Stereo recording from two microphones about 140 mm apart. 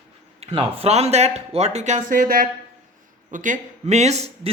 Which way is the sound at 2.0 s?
80° right.